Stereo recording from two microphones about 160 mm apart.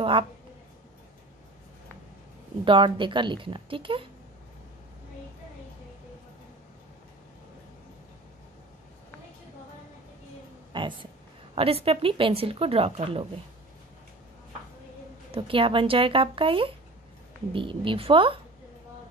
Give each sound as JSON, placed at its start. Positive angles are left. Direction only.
{"t": 2.6, "sound": "speech", "side_deg": -30}
{"t": 10.7, "sound": "speech", "side_deg": -30}
{"t": 15.3, "sound": "speech", "side_deg": -35}